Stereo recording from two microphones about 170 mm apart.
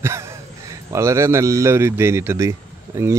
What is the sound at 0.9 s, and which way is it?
A man's voice, 15° right (ahead or behind).